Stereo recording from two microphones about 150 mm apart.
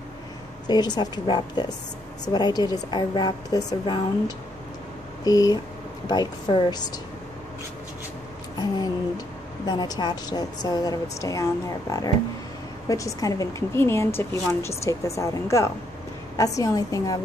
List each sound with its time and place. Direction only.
0.7 s a woman's voice: 30° left (ahead or behind)
5.2 s a woman's voice: 25° left (ahead or behind)
8.5 s a woman's voice: 25° left (ahead or behind)
12.8 s a woman's voice: 20° left (ahead or behind)